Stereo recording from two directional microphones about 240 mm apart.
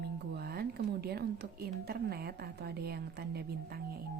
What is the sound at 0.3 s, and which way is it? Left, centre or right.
A woman's voice, right.